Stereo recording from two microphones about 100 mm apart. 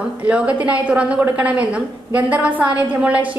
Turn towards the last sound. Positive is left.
turn(degrees=-15)  # may be behind; listen again after turning